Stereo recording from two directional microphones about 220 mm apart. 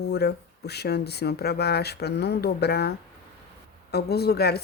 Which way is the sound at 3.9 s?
45° left (ahead or behind).